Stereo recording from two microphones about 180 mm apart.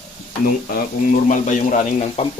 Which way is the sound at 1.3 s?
45° left (ahead or behind).